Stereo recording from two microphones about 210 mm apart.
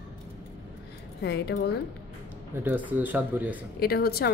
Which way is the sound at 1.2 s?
50° left (ahead or behind).